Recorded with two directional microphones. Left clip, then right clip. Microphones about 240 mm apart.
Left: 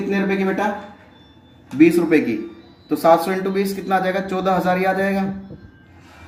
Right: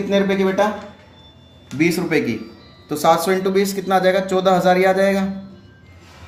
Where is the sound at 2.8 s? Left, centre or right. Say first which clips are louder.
Left 1 dB; right.